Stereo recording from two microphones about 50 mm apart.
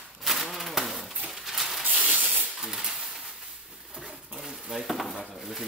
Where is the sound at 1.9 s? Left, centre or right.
Right.